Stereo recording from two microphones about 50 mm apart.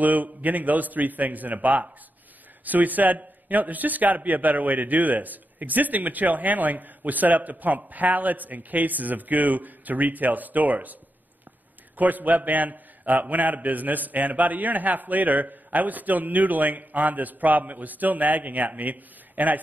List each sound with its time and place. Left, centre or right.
0.0 s a man's voice: right
12.0 s a man's voice: right